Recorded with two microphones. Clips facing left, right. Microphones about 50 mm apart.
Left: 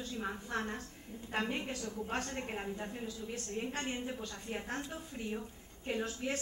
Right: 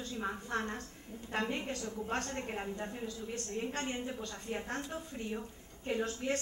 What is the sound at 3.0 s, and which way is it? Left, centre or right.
A woman's voice, centre.